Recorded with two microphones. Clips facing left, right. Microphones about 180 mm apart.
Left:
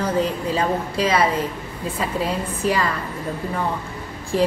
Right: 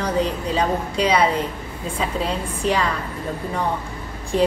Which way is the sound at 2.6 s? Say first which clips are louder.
Even; 5° left (ahead or behind).